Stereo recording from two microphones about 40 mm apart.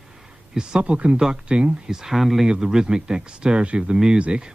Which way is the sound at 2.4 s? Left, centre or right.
Centre.